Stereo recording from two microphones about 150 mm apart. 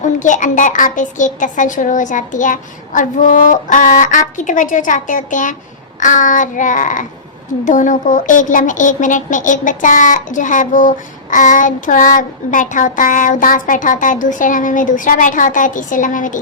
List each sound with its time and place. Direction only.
0.0 s speech: 55° left (ahead or behind)